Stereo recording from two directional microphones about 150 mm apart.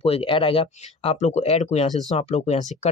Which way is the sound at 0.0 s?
40° left (ahead or behind).